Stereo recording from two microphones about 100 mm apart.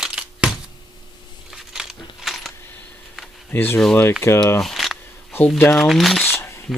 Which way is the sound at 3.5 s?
20° left (ahead or behind).